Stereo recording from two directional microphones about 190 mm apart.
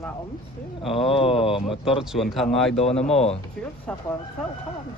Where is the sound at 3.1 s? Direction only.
35° left (ahead or behind).